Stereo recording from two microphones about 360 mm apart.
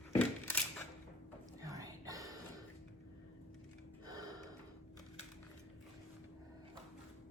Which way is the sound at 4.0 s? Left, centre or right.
Centre.